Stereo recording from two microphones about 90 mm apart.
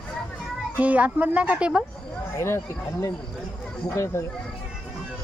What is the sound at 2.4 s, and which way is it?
Speech, 30° left (ahead or behind).